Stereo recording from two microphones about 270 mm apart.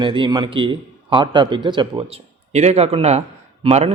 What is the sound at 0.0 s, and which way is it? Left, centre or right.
A man's voice, centre.